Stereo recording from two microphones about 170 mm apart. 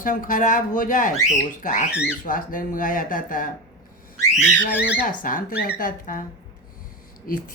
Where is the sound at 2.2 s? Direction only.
55° left (ahead or behind).